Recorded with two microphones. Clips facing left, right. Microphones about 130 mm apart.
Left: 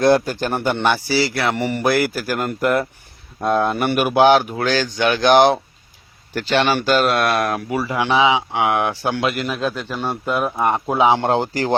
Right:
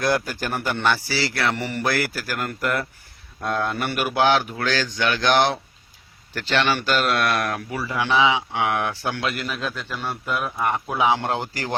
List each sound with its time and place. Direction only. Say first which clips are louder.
0.0 s a man's voice: left 7 dB; 25° left (ahead or behind)
6.8 s speech: left 5 dB; 30° left (ahead or behind)